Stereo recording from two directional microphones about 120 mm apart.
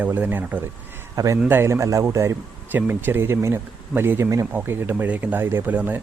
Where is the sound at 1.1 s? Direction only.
30° right (ahead or behind).